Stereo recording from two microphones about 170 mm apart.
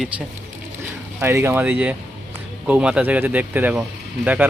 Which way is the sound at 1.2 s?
15° right (ahead or behind).